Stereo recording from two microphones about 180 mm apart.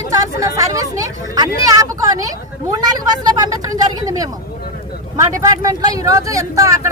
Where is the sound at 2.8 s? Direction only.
20° right (ahead or behind).